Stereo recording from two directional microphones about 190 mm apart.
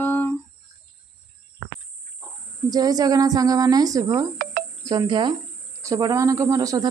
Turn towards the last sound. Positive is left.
turn(degrees=-20)  # may be behind; listen again after turning